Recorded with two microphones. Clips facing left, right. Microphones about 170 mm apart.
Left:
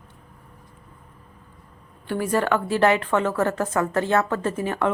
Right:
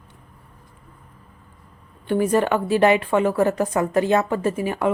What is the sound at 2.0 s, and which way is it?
A woman's voice, 20° right (ahead or behind).